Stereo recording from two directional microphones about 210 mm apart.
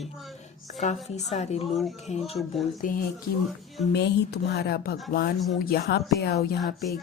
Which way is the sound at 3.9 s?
50° left (ahead or behind).